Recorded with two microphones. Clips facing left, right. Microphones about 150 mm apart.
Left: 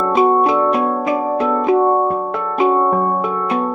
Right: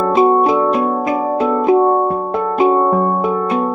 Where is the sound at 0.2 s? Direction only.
25° right (ahead or behind).